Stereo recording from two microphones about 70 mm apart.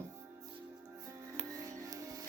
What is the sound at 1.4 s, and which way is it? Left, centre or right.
Music, right.